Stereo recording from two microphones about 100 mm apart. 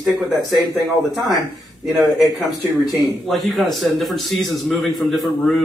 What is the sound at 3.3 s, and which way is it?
A man's voice, centre (ahead or behind).